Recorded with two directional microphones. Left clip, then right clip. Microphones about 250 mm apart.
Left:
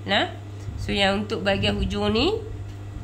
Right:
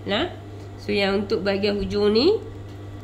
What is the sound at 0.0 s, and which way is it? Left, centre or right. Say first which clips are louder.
A woman's voice: left 2 dB; centre.